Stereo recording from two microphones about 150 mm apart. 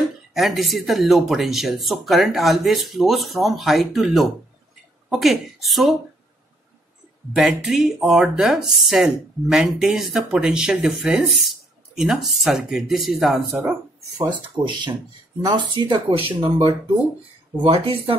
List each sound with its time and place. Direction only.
0.3 s speech: centre (ahead or behind)
7.3 s speech: 5° right (ahead or behind)
14.1 s speech: 30° right (ahead or behind)